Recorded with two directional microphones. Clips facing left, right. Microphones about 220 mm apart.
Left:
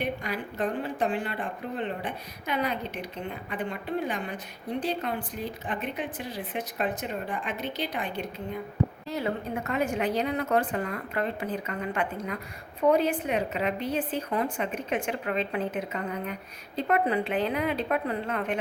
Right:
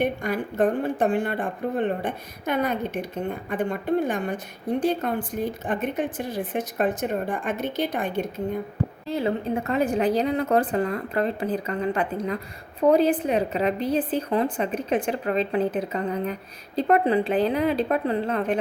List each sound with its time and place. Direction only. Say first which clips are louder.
0.0 s speech: right 6 dB; 50° right (ahead or behind)
9.0 s a woman's voice: right 6 dB; 30° right (ahead or behind)